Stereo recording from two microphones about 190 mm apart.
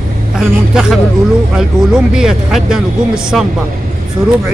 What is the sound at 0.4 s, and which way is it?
Speech, 5° right (ahead or behind).